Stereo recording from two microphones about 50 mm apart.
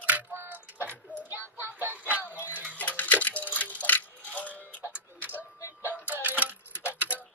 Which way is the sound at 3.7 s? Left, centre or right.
Left.